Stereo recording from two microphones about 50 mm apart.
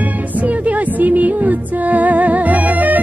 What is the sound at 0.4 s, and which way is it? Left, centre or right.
Music, right.